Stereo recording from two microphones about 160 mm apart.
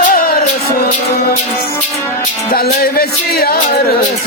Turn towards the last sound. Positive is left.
turn(degrees=70)  # may be behind; listen again after turning